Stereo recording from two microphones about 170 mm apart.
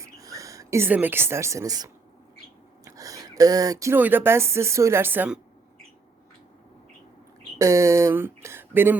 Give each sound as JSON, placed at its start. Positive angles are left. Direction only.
{"t": 0.0, "sound": "speech", "side_deg": -20}
{"t": 7.6, "sound": "speech", "side_deg": -20}